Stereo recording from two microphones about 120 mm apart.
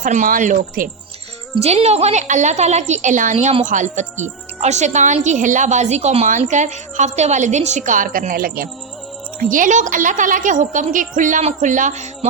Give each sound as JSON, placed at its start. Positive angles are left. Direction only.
{"t": 0.0, "sound": "a woman's voice", "side_deg": -90}
{"t": 1.6, "sound": "a woman's voice", "side_deg": -60}
{"t": 9.5, "sound": "a woman's voice", "side_deg": -90}